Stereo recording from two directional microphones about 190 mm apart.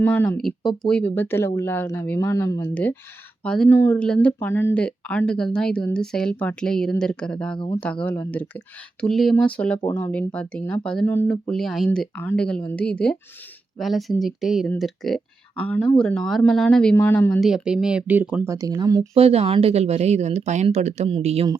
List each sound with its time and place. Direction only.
0.0 s speech: 10° left (ahead or behind)
17.5 s speech: 5° right (ahead or behind); by 19.0 s 20° right (ahead or behind)
19.1 s speech: 30° right (ahead or behind)